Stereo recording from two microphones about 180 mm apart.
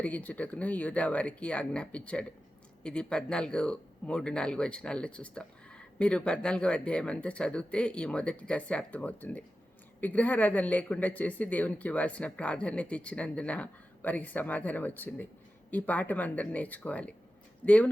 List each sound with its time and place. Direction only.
0.0 s speech: 10° left (ahead or behind)